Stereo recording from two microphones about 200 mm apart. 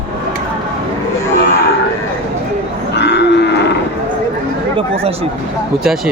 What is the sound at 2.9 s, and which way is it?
Cattle, 60° left (ahead or behind).